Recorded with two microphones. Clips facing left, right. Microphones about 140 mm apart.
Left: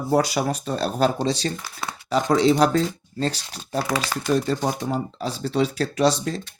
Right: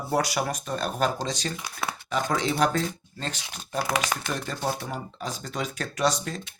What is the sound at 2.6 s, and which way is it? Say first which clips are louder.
Speech: left 5 dB; 35° left (ahead or behind).